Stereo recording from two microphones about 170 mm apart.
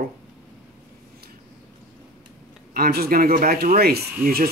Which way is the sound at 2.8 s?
60° right (ahead or behind).